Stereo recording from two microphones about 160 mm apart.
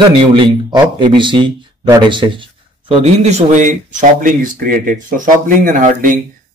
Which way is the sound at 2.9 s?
40° right (ahead or behind).